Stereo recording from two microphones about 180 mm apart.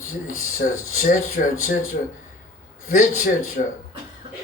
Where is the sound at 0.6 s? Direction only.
45° left (ahead or behind).